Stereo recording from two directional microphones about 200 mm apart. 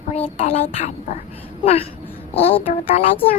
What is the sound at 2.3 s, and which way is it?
Speech, 30° left (ahead or behind).